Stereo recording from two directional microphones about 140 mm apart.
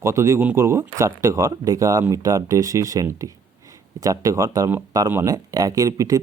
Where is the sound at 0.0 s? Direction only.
20° right (ahead or behind).